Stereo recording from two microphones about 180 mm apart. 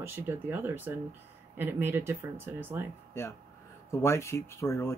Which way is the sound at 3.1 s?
15° left (ahead or behind).